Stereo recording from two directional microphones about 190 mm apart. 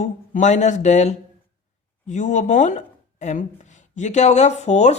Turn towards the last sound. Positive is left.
turn(degrees=35)  # may be behind; listen again after turning